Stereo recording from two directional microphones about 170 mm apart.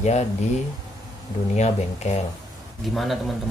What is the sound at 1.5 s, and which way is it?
Speech, 40° left (ahead or behind).